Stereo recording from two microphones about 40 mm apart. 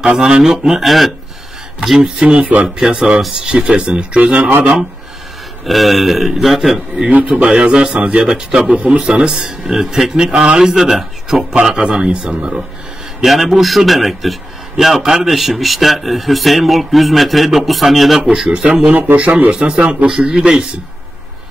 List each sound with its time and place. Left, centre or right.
0.2 s a man's voice: centre
0.8 s a man's voice: centre
2.0 s speech: centre
2.8 s speech: right
4.2 s speech: right
5.7 s a man's voice: centre
7.1 s a man's voice: right
13.2 s a man's voice: centre; by 20.6 s right